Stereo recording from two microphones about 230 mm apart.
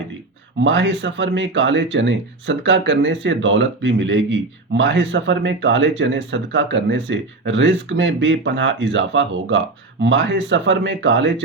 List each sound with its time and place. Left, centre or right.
0.6 s speech: right